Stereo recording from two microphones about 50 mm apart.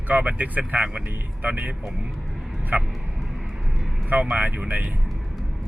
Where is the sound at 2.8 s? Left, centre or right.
Centre.